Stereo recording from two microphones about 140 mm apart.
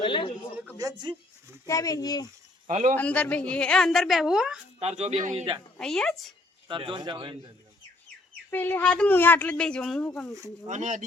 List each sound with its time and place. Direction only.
0.0 s speech: 35° left (ahead or behind)
0.8 s speech: 30° right (ahead or behind)
1.6 s speech: 25° left (ahead or behind)
2.6 s speech: 60° right (ahead or behind)
2.9 s a woman's voice: 10° left (ahead or behind)
4.8 s speech: 50° right (ahead or behind)
5.8 s a woman's voice: 5° left (ahead or behind)
6.7 s speech: 35° right (ahead or behind)
8.4 s a woman's voice: 15° left (ahead or behind)
10.7 s speech: 60° right (ahead or behind)